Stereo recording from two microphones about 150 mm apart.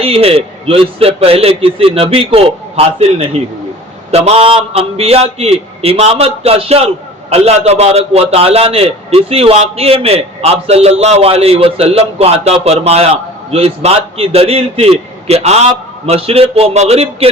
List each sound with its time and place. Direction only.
0.0 s a man's voice: 40° right (ahead or behind)